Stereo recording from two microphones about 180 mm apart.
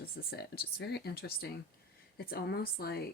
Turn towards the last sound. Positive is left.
turn(degrees=60)  # may be behind; listen again after turning